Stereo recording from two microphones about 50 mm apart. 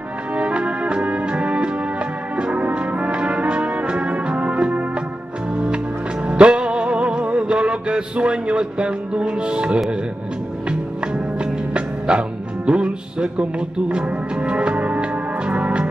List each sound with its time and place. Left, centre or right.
0.3 s music: right
2.3 s brass instrument: right
5.5 s music: right